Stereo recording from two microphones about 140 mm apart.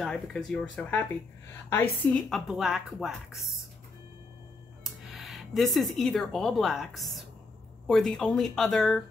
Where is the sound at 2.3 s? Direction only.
Centre (ahead or behind).